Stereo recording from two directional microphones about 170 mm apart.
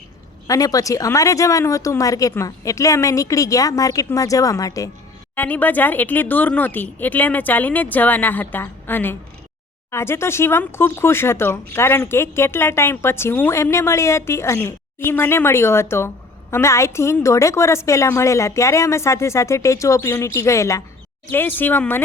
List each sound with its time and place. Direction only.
0.4 s speech: 20° left (ahead or behind)